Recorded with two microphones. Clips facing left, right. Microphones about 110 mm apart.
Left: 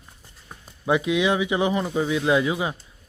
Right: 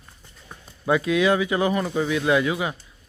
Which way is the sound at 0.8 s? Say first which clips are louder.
Right 1 dB; 15° left (ahead or behind).